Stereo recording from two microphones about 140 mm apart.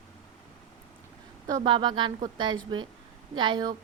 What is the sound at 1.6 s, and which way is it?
A woman's voice, 35° right (ahead or behind).